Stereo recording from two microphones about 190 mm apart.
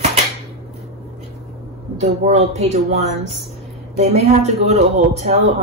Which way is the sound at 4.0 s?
35° right (ahead or behind).